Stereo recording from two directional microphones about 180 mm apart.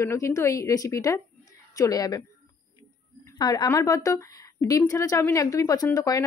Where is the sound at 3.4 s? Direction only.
20° left (ahead or behind).